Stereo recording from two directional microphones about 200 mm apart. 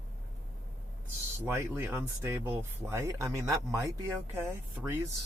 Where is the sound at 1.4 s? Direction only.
10° right (ahead or behind).